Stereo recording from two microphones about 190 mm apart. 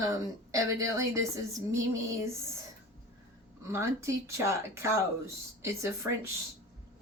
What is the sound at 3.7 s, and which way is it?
Speech, 15° right (ahead or behind).